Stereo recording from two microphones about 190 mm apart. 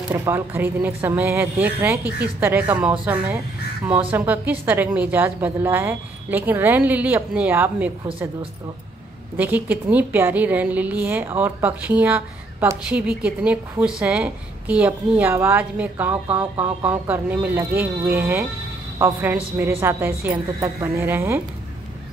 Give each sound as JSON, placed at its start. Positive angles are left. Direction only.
{"t": 0.1, "sound": "a woman's voice", "side_deg": -10}
{"t": 9.4, "sound": "a woman's voice", "side_deg": -10}